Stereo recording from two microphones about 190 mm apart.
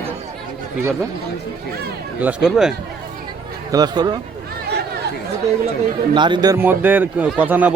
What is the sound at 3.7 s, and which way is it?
Speech, 20° right (ahead or behind).